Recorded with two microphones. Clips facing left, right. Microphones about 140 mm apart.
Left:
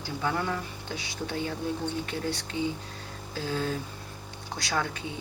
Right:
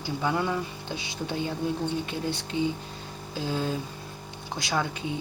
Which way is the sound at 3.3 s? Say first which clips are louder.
Right 1 dB; 15° right (ahead or behind).